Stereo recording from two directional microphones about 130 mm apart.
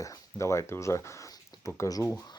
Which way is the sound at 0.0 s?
25° left (ahead or behind).